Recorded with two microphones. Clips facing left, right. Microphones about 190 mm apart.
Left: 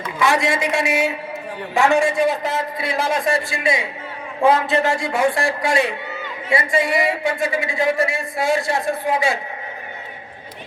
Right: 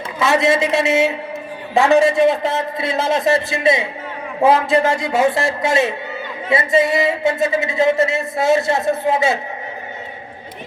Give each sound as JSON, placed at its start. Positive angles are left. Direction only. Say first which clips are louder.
{"t": 0.2, "sound": "a man's voice", "louder": "right 4 dB", "side_deg": -25}